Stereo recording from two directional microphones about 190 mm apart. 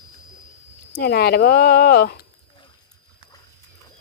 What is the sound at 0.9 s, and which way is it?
Speech, 55° left (ahead or behind).